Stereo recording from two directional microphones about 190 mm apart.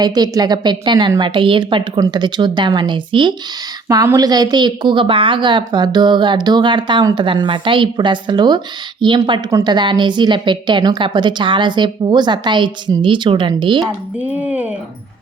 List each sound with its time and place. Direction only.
0.0 s a woman's voice: 20° right (ahead or behind)
14.2 s speech: 5° right (ahead or behind)